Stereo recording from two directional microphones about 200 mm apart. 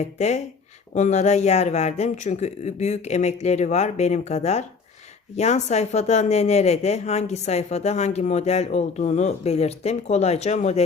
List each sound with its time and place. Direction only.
0.0 s speech: 35° left (ahead or behind)